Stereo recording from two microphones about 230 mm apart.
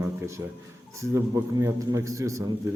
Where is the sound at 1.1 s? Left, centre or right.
Centre.